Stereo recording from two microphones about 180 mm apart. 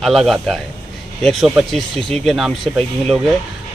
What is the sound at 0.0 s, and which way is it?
A man's voice, centre (ahead or behind).